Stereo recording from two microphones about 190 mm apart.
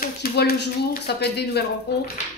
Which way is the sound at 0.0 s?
50° left (ahead or behind).